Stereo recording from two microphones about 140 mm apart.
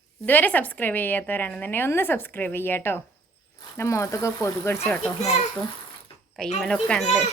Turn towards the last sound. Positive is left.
turn(degrees=5)  # may be behind; listen again after turning